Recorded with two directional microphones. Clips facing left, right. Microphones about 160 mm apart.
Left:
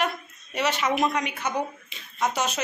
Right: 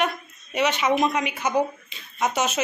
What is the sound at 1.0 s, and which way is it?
A woman's voice, 5° right (ahead or behind).